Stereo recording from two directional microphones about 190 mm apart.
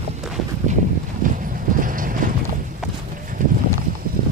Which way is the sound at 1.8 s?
45° right (ahead or behind).